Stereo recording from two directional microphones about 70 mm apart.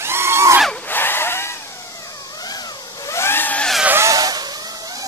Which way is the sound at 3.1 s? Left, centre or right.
Left.